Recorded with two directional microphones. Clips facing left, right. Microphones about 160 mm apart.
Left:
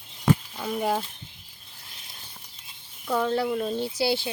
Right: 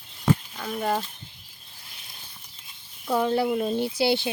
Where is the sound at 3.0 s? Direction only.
10° right (ahead or behind).